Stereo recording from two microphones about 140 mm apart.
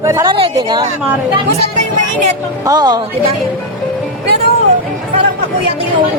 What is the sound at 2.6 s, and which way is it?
Speech, 30° right (ahead or behind).